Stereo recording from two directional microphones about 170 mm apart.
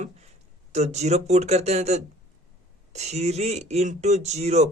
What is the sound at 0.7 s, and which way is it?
A man's voice, 40° right (ahead or behind).